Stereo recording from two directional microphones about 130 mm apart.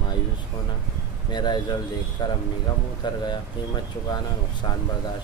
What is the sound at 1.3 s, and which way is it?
Speech, 35° left (ahead or behind).